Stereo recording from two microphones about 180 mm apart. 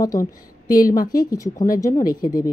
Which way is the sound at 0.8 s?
50° left (ahead or behind).